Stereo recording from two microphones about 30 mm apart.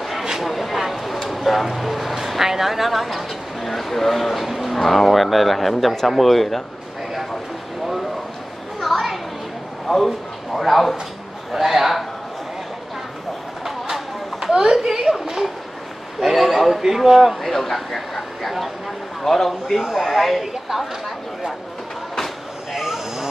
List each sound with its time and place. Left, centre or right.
0.4 s vehicle: centre
0.9 s speech: centre
4.7 s speech: centre
7.8 s a sound: centre
8.8 s children playing: centre
9.8 s speech: centre
11.5 s a man's voice: centre
13.7 s a sound: centre
14.5 s speech: right
14.9 s a sound: centre
16.2 s a man's voice: centre
17.4 s speech: centre
19.2 s speech: centre
22.7 s a sound: centre